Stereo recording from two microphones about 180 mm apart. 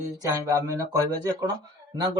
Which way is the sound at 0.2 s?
20° right (ahead or behind).